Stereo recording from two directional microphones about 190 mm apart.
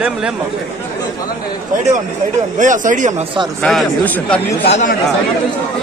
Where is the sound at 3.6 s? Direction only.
5° left (ahead or behind).